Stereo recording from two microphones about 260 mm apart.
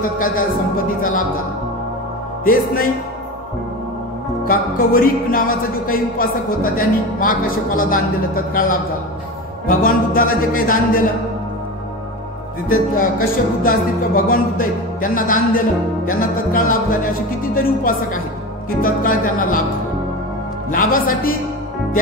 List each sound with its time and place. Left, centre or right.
0.2 s speech: left
2.4 s speech: left
4.5 s speech: left
9.7 s speech: left
12.9 s speech: left
20.7 s speech: left